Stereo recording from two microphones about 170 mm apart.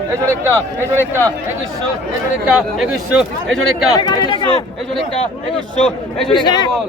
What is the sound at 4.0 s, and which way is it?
Speech, 25° left (ahead or behind).